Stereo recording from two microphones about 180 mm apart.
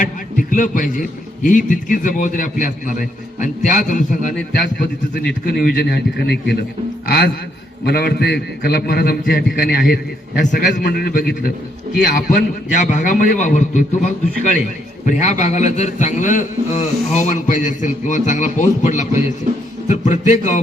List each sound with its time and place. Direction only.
0.0 s a sound: 50° left (ahead or behind)
1.5 s a man's voice: 50° left (ahead or behind); by 6.6 s 65° left (ahead or behind)
7.9 s a man's voice: 60° left (ahead or behind); by 13.8 s 45° left (ahead or behind)
15.0 s a man's voice: 45° left (ahead or behind)